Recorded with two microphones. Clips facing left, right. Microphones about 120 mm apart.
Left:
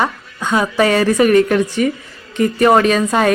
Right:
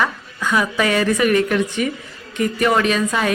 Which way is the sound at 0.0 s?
25° left (ahead or behind).